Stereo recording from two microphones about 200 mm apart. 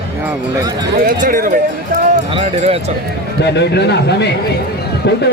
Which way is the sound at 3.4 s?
55° left (ahead or behind).